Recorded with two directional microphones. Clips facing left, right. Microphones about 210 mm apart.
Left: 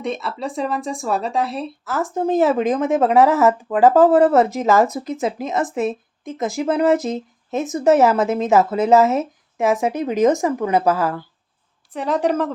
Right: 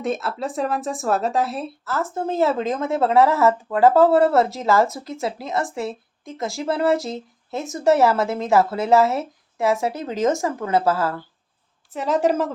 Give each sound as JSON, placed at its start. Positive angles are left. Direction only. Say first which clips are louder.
{"t": 0.0, "sound": "speech", "louder": "even", "side_deg": 0}
{"t": 1.8, "sound": "speech", "louder": "left 4 dB", "side_deg": 15}
{"t": 11.9, "sound": "speech", "louder": "even", "side_deg": 0}